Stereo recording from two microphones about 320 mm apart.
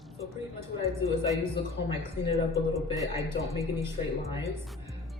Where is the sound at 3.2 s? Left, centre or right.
Centre.